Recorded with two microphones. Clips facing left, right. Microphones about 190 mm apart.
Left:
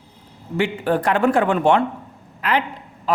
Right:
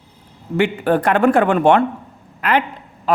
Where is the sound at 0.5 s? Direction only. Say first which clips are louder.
Right 3 dB; 60° right (ahead or behind).